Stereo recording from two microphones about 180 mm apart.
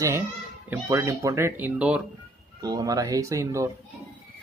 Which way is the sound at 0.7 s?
15° right (ahead or behind).